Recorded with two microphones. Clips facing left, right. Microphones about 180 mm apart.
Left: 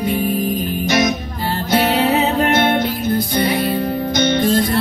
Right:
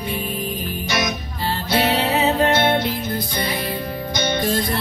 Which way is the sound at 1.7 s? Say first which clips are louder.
Left 4 dB; 45° left (ahead or behind).